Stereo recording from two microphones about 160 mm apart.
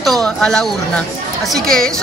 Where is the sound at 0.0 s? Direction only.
5° left (ahead or behind).